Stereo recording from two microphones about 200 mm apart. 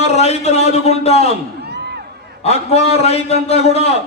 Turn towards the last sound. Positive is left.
turn(degrees=30)  # may be behind; listen again after turning